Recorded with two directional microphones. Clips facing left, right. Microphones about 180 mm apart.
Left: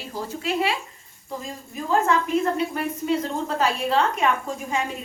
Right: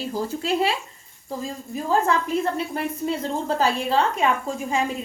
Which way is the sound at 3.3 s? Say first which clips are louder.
Right 2 dB; 35° right (ahead or behind).